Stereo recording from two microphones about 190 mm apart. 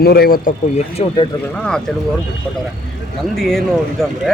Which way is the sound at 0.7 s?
30° left (ahead or behind).